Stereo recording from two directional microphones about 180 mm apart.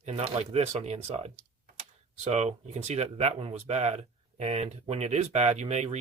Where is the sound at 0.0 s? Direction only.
35° right (ahead or behind).